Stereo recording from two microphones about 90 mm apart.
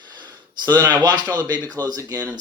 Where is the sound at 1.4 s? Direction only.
50° right (ahead or behind).